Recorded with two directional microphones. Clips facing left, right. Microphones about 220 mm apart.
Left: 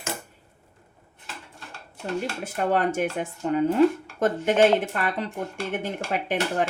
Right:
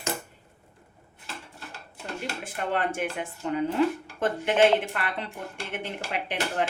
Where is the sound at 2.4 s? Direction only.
40° left (ahead or behind).